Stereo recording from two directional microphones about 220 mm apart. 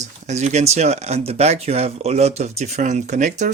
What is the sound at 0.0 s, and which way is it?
Speech, 30° right (ahead or behind).